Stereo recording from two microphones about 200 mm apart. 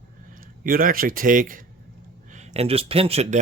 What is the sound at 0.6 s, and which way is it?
Speech, 45° right (ahead or behind).